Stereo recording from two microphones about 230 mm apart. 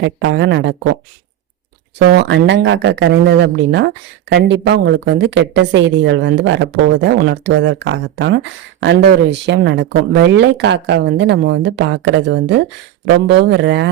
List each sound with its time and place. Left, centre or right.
0.0 s speech: right
2.0 s speech: right